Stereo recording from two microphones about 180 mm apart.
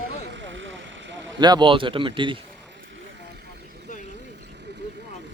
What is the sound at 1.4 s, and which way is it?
Speech, 25° right (ahead or behind).